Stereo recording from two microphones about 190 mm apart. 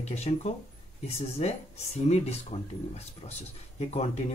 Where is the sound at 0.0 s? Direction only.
35° left (ahead or behind).